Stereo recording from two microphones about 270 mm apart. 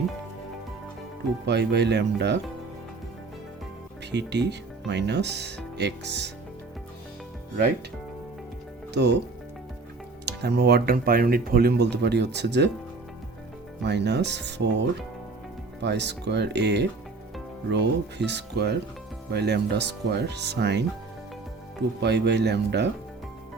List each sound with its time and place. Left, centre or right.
1.5 s speech: right
4.1 s speech: right
8.9 s speech: right
10.2 s speech: right
13.8 s speech: right
22.0 s speech: right